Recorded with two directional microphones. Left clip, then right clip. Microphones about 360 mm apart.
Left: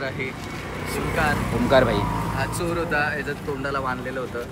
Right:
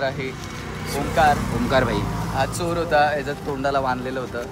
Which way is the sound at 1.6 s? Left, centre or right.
Centre.